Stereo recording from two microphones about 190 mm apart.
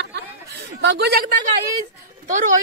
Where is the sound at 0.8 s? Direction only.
60° right (ahead or behind).